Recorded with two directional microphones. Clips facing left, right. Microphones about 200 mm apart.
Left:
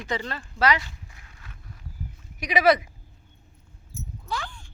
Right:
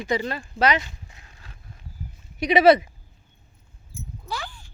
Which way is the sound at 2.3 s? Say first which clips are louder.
Right 5 dB; 25° right (ahead or behind).